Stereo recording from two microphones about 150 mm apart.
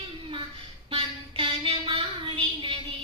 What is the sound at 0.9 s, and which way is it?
Child singing, 35° right (ahead or behind).